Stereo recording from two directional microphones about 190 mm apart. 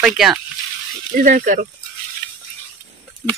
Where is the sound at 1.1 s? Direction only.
45° right (ahead or behind).